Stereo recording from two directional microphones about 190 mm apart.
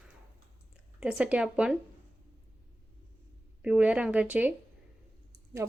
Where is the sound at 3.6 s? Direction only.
5° right (ahead or behind).